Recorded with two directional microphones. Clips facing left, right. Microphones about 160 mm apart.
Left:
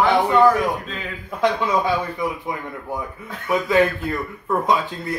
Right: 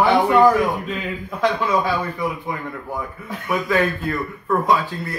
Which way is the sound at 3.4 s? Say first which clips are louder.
Left 2 dB; 20° left (ahead or behind).